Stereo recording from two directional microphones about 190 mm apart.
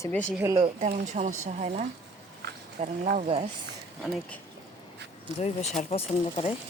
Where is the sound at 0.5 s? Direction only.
35° right (ahead or behind).